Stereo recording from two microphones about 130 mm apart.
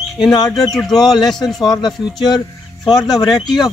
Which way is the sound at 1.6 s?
30° left (ahead or behind).